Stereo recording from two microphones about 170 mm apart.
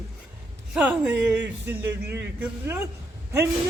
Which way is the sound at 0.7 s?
5° right (ahead or behind).